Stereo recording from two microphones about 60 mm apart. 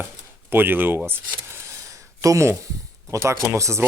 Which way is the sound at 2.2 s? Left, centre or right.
Right.